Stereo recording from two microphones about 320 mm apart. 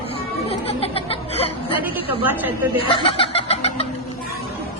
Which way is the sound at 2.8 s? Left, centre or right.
Centre.